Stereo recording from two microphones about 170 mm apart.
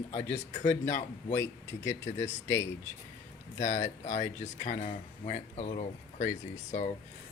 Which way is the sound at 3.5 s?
45° left (ahead or behind).